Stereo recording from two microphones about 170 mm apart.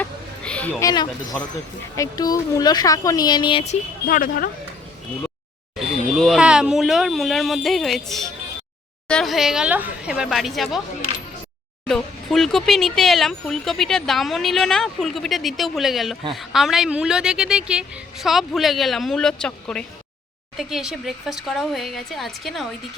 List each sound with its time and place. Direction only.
0.0 s a sound: 5° left (ahead or behind)
0.8 s speech: 20° left (ahead or behind)
4.0 s speech: 55° left (ahead or behind)
5.7 s speech: centre (ahead or behind)
11.9 s speech: 5° left (ahead or behind)